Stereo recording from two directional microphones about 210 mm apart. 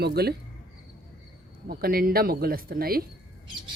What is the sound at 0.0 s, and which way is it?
Speech, 50° right (ahead or behind).